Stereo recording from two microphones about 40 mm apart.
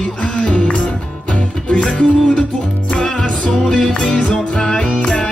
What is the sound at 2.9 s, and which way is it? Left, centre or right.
Music, centre.